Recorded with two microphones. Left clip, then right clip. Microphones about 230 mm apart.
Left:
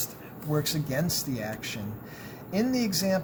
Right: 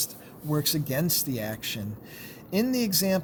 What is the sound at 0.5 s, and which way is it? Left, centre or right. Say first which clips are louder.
Speech: right 1 dB; right.